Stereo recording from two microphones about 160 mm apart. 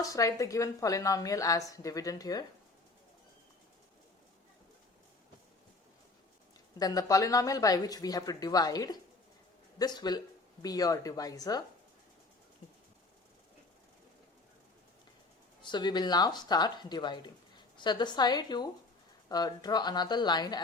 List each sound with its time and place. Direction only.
0.0 s a woman's voice: 20° left (ahead or behind)
6.7 s a woman's voice: 25° left (ahead or behind)
15.6 s a woman's voice: 30° left (ahead or behind)